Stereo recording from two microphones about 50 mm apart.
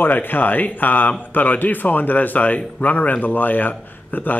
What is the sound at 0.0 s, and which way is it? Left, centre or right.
A man's voice, left.